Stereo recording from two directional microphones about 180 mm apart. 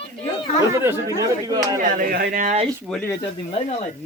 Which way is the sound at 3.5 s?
35° left (ahead or behind).